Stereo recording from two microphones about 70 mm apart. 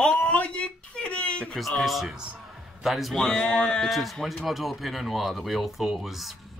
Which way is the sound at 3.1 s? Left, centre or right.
Centre.